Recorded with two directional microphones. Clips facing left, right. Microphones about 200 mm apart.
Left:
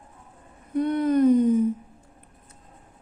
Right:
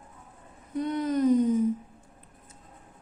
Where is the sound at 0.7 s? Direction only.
55° left (ahead or behind).